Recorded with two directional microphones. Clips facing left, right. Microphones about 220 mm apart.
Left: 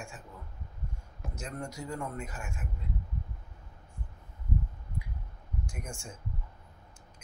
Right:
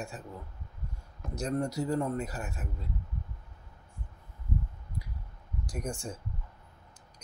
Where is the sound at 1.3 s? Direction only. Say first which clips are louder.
Right 9 dB; 35° right (ahead or behind).